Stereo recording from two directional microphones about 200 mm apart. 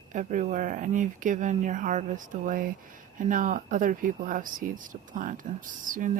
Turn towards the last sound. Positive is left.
turn(degrees=-40)  # may be behind; listen again after turning